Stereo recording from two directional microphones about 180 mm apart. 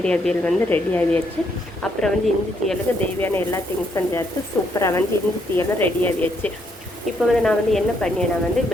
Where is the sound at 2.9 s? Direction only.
10° left (ahead or behind).